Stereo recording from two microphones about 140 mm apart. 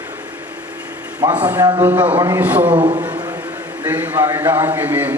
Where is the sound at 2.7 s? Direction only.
35° right (ahead or behind).